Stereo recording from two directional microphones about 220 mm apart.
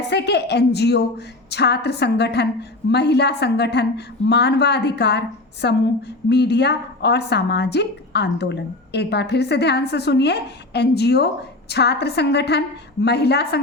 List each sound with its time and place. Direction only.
0.1 s a woman's voice: 50° left (ahead or behind)